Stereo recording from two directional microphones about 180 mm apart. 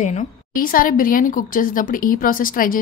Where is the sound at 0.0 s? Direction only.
40° left (ahead or behind).